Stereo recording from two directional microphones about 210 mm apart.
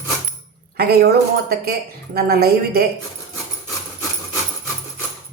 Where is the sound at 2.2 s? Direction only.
50° right (ahead or behind).